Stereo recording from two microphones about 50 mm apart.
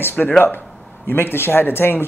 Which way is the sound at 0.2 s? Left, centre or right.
Centre.